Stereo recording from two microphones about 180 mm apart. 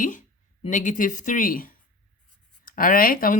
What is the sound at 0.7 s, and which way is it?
A woman's voice, 45° left (ahead or behind).